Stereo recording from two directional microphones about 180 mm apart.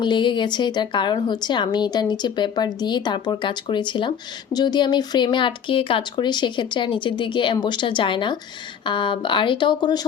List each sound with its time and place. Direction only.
0.0 s a woman's voice: 25° left (ahead or behind)